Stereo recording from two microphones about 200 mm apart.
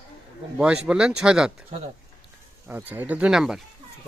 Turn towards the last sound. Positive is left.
turn(degrees=0)  # may be behind; listen again after turning